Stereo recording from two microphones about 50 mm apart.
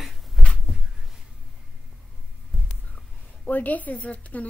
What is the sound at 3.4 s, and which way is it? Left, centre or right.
A woman's voice, left.